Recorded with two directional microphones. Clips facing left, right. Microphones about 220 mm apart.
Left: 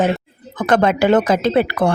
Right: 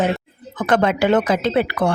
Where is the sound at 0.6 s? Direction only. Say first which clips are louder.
Left 2 dB; 40° left (ahead or behind).